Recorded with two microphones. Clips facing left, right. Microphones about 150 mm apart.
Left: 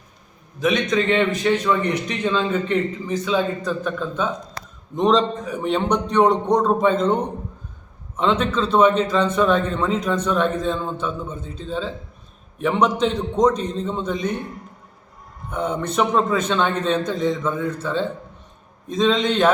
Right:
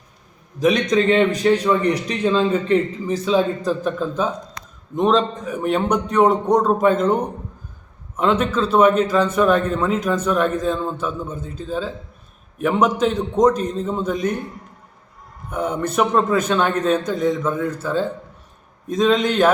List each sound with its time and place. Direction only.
0.6 s speech: 35° right (ahead or behind)
4.9 s a man's voice: 5° right (ahead or behind)
15.4 s a man's voice: 10° right (ahead or behind)